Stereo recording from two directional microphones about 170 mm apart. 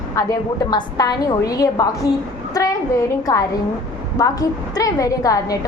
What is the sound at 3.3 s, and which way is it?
A woman's voice, 20° left (ahead or behind).